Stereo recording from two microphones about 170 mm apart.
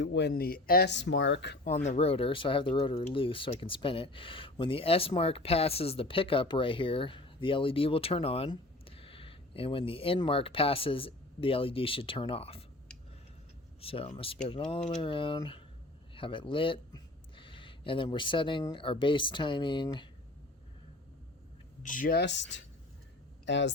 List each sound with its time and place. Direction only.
0.0 s speech: 90° left
1.6 s speech: 45° left (ahead or behind)
13.8 s speech: 35° left (ahead or behind)
21.8 s speech: 50° left (ahead or behind)
22.2 s speech: 90° left